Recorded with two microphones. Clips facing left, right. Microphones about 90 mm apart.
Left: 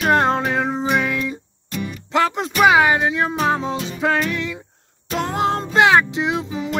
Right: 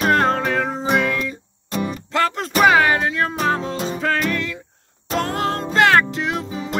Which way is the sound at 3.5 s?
20° left (ahead or behind).